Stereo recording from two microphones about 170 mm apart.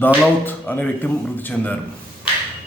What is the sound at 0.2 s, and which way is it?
A man's voice, 10° left (ahead or behind).